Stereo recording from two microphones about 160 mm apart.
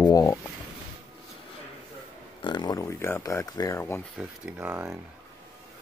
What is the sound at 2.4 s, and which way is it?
Speech, 25° left (ahead or behind).